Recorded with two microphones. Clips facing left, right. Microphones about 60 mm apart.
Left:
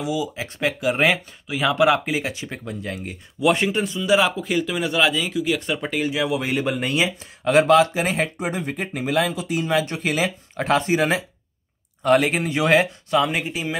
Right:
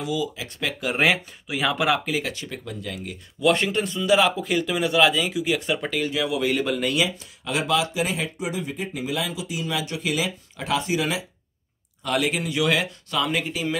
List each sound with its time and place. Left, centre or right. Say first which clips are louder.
0.0 s speech: left 2 dB; centre
0.7 s speech: left 1 dB; centre
2.0 s speech: left 2 dB; left
3.3 s speech: left 1 dB; centre
5.9 s speech: left 5 dB; centre
7.4 s speech: left 9 dB; left